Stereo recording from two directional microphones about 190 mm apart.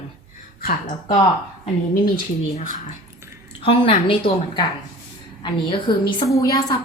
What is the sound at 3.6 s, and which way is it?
Speech, 30° left (ahead or behind).